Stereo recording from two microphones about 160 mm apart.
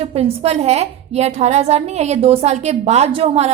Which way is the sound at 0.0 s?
40° right (ahead or behind).